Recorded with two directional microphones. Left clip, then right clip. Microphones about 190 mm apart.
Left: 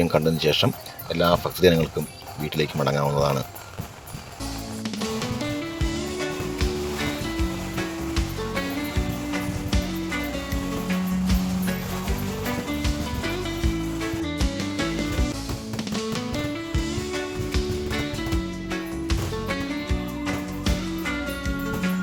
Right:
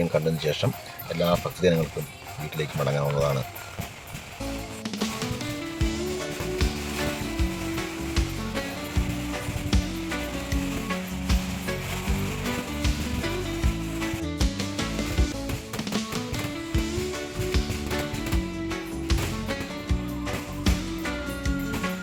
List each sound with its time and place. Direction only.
0.0 s speech: 15° left (ahead or behind)
5.8 s music: centre (ahead or behind)
14.3 s music: centre (ahead or behind)
18.7 s music: centre (ahead or behind)